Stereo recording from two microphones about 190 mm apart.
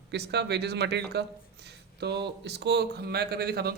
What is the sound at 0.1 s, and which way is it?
Speech, 60° right (ahead or behind).